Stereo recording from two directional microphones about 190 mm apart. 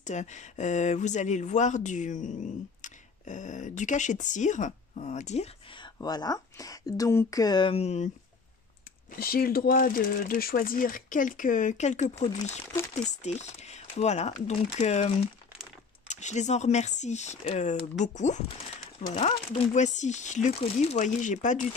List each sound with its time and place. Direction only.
0.0 s speech: 40° left (ahead or behind)
5.8 s speech: 20° left (ahead or behind)
9.1 s speech: 50° left (ahead or behind)